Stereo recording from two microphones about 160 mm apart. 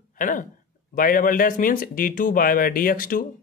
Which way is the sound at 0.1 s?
55° left (ahead or behind).